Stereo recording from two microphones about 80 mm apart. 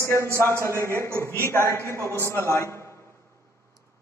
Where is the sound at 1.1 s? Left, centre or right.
Right.